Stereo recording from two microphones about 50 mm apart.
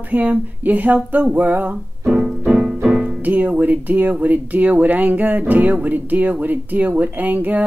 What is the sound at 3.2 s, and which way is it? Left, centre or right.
Speech, right.